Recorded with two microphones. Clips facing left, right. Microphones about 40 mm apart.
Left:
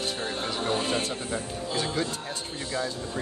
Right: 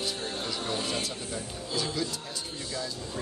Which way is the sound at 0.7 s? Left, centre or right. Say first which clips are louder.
Left 6 dB; left.